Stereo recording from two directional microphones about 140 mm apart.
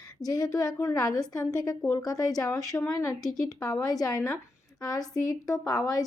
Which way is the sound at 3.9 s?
25° left (ahead or behind).